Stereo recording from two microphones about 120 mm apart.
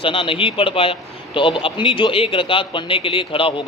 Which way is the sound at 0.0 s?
45° left (ahead or behind).